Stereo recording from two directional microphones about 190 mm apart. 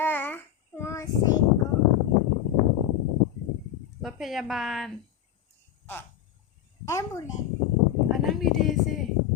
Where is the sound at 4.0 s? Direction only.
Centre (ahead or behind).